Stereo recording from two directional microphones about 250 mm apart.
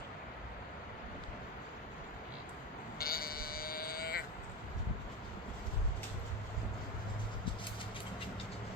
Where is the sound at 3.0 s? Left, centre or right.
Left.